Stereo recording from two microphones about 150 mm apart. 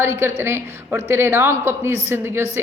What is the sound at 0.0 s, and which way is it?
A woman's voice, 15° right (ahead or behind).